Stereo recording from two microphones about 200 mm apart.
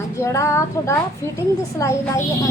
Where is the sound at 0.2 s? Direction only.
15° left (ahead or behind).